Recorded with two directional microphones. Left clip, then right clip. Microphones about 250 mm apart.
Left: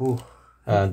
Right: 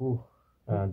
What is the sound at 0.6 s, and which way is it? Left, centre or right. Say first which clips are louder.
Speech: left 11 dB; left.